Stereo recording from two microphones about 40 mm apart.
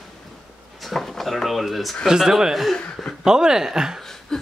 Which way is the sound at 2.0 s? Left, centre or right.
Centre.